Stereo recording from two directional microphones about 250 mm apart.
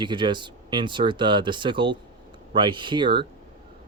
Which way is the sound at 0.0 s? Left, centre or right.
Centre.